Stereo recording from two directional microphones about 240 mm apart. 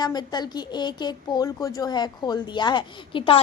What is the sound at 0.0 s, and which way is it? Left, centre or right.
Speech, centre.